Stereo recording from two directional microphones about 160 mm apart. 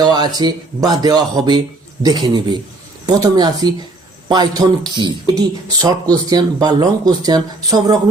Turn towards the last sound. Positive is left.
turn(degrees=-25)  # may be behind; listen again after turning